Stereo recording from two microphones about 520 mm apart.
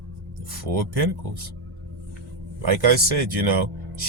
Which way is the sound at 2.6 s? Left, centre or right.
Right.